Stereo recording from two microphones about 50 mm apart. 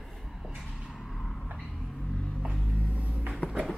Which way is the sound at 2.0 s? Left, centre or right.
Centre.